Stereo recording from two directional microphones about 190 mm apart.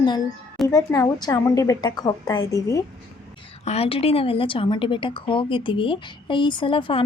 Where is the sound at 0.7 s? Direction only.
20° left (ahead or behind).